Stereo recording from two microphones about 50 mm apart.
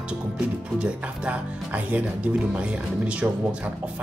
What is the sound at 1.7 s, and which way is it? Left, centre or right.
Speech, right.